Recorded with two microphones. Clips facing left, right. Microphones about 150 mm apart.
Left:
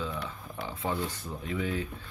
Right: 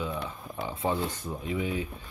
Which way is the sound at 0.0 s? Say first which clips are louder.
Right 2 dB; 15° right (ahead or behind).